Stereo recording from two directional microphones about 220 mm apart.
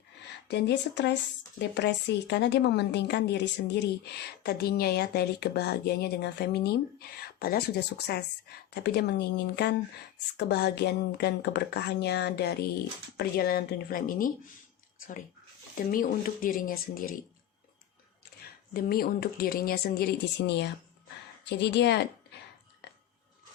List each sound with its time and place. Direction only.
0.4 s speech: 50° left (ahead or behind)
15.7 s speech: 40° left (ahead or behind)
18.4 s speech: 45° left (ahead or behind)